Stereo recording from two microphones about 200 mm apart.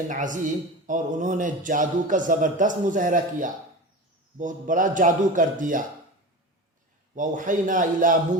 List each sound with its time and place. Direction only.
0.1 s speech: 40° right (ahead or behind)
7.2 s speech: 40° right (ahead or behind)